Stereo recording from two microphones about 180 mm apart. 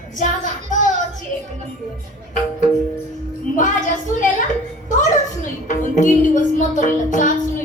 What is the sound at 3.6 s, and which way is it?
Music, 45° left (ahead or behind).